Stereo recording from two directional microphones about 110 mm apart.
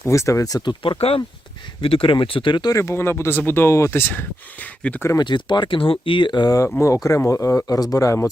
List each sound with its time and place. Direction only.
0.0 s speech: 25° left (ahead or behind); by 2.7 s 45° left (ahead or behind)
2.7 s speech: 25° left (ahead or behind)
5.2 s speech: 45° left (ahead or behind); by 8.3 s 30° left (ahead or behind)